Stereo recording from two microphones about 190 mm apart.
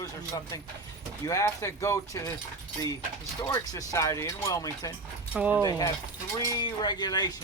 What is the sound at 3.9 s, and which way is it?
Speech, 15° left (ahead or behind).